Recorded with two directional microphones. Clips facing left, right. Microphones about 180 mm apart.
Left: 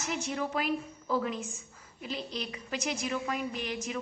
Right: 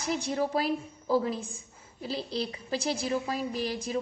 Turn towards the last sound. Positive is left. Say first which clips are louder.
# right 4 dB
turn(degrees=-35)  # may be behind; listen again after turning